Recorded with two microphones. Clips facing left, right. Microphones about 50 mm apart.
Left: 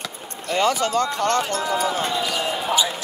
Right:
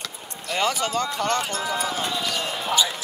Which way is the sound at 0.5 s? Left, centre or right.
Centre.